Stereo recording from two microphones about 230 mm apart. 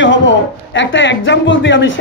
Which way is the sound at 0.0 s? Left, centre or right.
Left.